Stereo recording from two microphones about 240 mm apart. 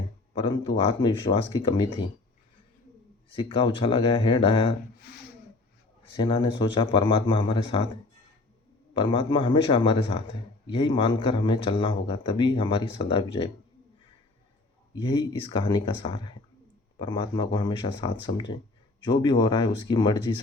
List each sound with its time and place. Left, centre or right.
0.4 s a man's voice: centre
3.2 s a man's voice: left
6.1 s a man's voice: centre
8.9 s a man's voice: centre
15.0 s a man's voice: centre